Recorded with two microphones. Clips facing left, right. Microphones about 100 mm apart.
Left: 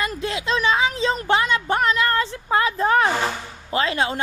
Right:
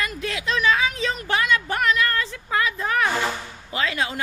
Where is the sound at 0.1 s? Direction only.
30° left (ahead or behind).